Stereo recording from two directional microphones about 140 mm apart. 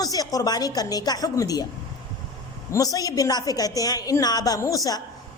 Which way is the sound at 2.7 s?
25° left (ahead or behind).